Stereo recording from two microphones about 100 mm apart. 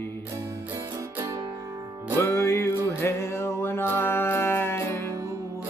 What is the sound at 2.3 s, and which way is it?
Music, 25° left (ahead or behind).